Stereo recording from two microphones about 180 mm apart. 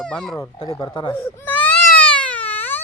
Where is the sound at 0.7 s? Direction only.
20° left (ahead or behind).